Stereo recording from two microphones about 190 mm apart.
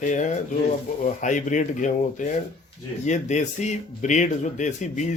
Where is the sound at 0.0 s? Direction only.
40° left (ahead or behind).